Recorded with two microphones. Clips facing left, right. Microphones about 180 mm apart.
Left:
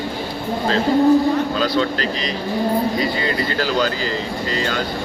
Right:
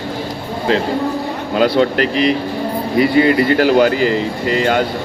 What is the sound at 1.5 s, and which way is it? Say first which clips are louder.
Speech: right 6 dB; 60° right (ahead or behind).